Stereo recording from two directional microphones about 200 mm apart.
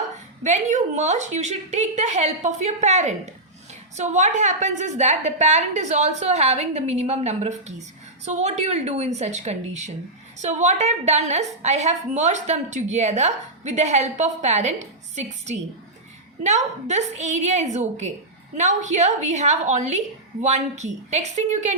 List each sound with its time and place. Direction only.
0.4 s a woman's voice: 35° right (ahead or behind)